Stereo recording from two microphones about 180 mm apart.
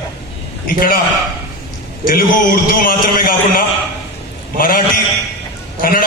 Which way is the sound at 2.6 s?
55° left (ahead or behind).